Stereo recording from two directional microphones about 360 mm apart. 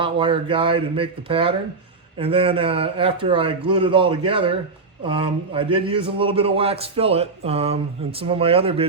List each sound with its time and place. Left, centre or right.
0.0 s a man's voice: centre